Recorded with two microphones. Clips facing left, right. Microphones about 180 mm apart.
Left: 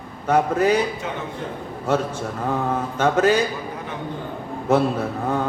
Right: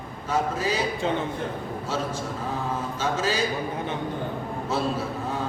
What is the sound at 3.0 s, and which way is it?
Speech, 60° left (ahead or behind).